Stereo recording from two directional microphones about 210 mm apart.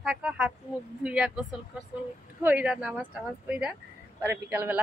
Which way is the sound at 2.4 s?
5° right (ahead or behind).